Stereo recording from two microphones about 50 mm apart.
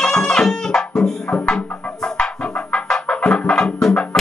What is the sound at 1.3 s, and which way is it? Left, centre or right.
Music, left.